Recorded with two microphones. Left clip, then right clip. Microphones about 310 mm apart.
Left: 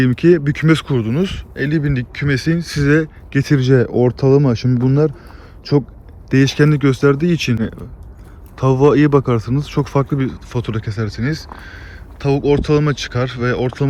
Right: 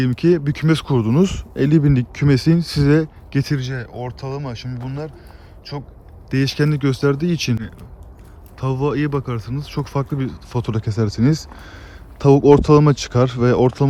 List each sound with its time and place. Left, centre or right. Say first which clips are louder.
0.0 s speech: left 4 dB; centre
3.6 s speech: left 15 dB; centre
6.3 s speech: left 6 dB; centre